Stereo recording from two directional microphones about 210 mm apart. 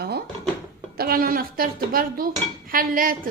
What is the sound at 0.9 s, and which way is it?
A woman's voice, 45° right (ahead or behind).